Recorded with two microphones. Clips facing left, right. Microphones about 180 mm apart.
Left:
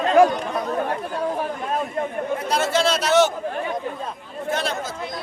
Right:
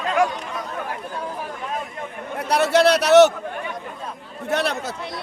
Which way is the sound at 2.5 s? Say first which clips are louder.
Right 6 dB; 65° right (ahead or behind).